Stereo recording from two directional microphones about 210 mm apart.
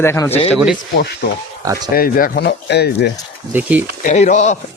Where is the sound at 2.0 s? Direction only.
45° left (ahead or behind).